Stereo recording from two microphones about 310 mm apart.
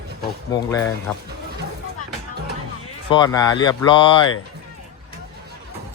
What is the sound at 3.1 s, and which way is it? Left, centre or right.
Speech, centre.